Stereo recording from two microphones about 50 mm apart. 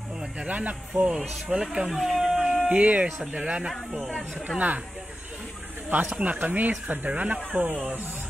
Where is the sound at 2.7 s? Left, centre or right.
Right.